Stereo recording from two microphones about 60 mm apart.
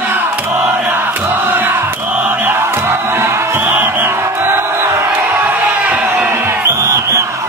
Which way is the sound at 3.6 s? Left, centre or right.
Right.